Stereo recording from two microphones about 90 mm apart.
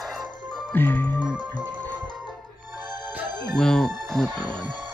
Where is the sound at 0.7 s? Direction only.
20° left (ahead or behind).